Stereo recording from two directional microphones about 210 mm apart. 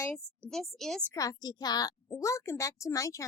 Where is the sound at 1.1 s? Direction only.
15° left (ahead or behind).